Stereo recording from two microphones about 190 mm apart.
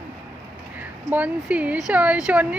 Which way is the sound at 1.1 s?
5° right (ahead or behind).